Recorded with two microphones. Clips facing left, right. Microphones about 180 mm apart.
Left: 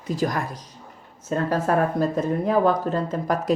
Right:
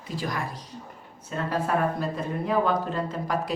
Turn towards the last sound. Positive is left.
turn(degrees=45)  # may be behind; listen again after turning